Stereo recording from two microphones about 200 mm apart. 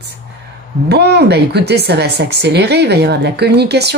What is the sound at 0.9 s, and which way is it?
A woman's voice, 55° right (ahead or behind).